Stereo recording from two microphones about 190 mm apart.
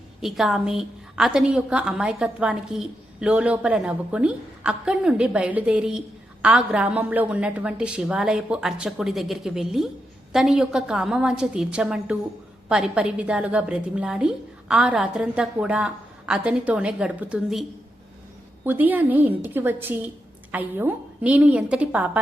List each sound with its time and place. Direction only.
0.2 s a woman's voice: centre (ahead or behind)